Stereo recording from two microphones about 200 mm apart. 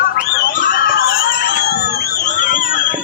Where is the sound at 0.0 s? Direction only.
45° left (ahead or behind).